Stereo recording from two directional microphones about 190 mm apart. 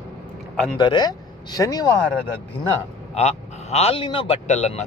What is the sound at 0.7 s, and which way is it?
Speech, 25° left (ahead or behind).